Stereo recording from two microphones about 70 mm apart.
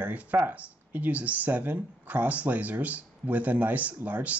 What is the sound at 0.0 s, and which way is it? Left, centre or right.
Speech, right.